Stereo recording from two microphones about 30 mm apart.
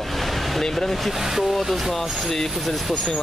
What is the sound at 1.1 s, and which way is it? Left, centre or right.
Speech, centre.